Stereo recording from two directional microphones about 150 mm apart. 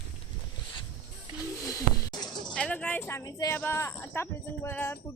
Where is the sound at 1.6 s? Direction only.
25° left (ahead or behind).